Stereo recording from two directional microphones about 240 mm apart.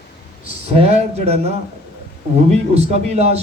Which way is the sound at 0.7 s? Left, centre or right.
Right.